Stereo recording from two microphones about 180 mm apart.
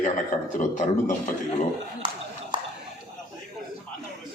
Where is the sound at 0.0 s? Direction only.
45° left (ahead or behind).